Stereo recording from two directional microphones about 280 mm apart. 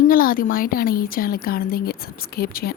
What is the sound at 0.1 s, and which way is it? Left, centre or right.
A woman's voice, left.